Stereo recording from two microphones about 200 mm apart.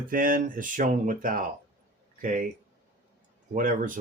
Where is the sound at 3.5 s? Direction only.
40° right (ahead or behind).